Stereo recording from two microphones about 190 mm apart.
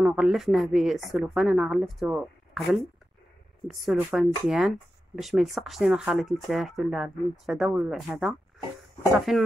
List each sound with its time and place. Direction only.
0.0 s a woman's voice: 5° right (ahead or behind)